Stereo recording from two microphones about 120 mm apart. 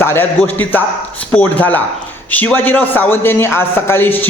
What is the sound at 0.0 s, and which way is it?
A man's voice, 20° left (ahead or behind).